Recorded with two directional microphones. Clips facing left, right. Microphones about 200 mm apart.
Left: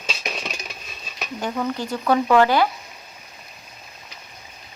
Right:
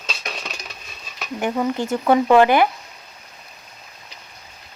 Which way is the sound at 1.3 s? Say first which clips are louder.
Right 4 dB; 20° right (ahead or behind).